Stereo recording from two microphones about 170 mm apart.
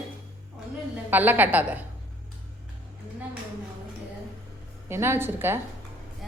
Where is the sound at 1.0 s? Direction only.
10° right (ahead or behind).